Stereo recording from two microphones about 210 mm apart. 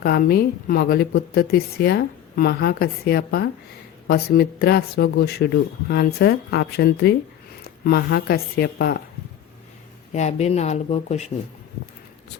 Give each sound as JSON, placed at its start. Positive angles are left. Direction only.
{"t": 0.0, "sound": "speech", "side_deg": 45}
{"t": 10.1, "sound": "speech", "side_deg": 35}